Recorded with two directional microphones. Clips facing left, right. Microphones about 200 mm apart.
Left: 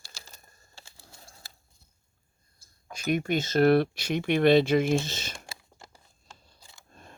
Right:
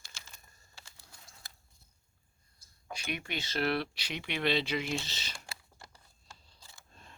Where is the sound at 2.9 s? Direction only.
45° left (ahead or behind).